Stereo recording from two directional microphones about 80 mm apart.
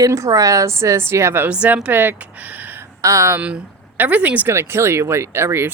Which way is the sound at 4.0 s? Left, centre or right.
Centre.